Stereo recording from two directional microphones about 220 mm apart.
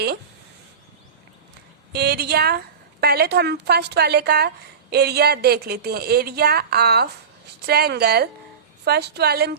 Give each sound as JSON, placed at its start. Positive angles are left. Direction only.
{"t": 1.9, "sound": "a woman's voice", "side_deg": -45}